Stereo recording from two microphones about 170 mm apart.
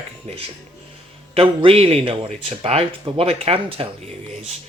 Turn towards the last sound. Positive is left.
turn(degrees=-35)  # may be behind; listen again after turning